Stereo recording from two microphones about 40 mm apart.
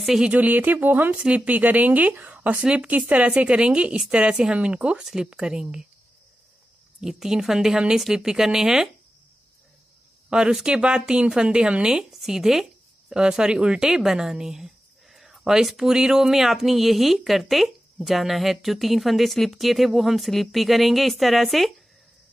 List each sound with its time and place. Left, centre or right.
0.3 s speech: right
1.1 s speech: right
2.5 s speech: right
5.0 s a woman's voice: centre
7.0 s a woman's voice: centre
10.3 s speech: centre
11.9 s a woman's voice: centre
13.1 s speech: right; by 21.7 s centre